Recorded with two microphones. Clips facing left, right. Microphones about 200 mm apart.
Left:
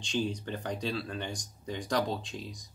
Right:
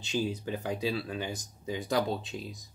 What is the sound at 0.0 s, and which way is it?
Speech, 5° right (ahead or behind).